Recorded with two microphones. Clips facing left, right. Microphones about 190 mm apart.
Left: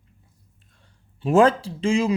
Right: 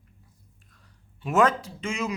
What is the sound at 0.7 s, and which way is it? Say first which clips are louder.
Speech: left 2 dB; 30° left (ahead or behind).